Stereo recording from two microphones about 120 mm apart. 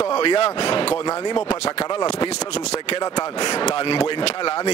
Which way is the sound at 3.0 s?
35° left (ahead or behind).